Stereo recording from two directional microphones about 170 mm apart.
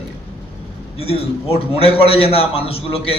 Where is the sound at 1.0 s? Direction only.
35° left (ahead or behind).